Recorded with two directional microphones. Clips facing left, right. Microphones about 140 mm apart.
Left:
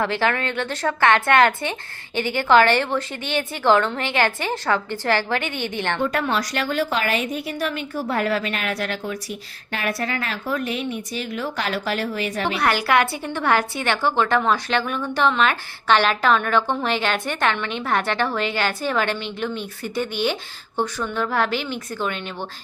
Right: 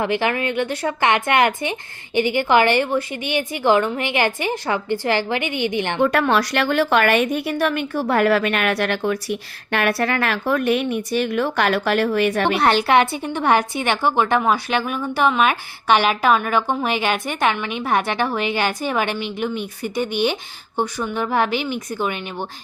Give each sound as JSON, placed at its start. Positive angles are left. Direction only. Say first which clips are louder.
{"t": 0.0, "sound": "a woman's voice", "louder": "right 1 dB", "side_deg": -15}
{"t": 6.0, "sound": "a woman's voice", "louder": "right 7 dB", "side_deg": -75}
{"t": 12.5, "sound": "a woman's voice", "louder": "right 2 dB", "side_deg": -25}